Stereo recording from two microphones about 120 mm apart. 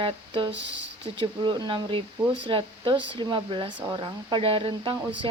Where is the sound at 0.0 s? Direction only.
45° right (ahead or behind).